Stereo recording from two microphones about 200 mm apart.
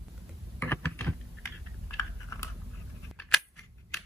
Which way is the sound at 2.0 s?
15° left (ahead or behind).